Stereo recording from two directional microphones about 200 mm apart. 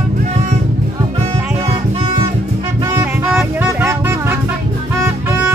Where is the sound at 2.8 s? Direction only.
15° right (ahead or behind).